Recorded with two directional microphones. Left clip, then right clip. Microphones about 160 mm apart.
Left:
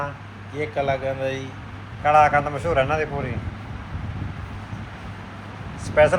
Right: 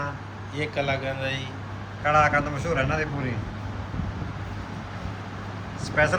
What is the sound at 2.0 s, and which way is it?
Speech, 10° left (ahead or behind).